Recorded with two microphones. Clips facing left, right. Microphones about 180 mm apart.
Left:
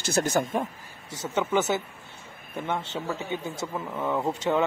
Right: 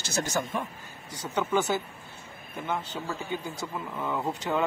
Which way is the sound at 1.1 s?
25° left (ahead or behind).